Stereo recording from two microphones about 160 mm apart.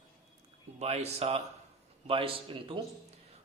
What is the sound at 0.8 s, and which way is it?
Speech, 40° right (ahead or behind).